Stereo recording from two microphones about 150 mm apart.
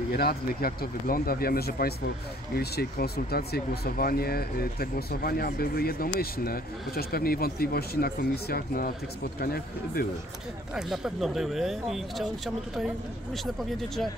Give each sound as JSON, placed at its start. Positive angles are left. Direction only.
{"t": 0.1, "sound": "speech", "side_deg": 90}
{"t": 10.7, "sound": "speech", "side_deg": 0}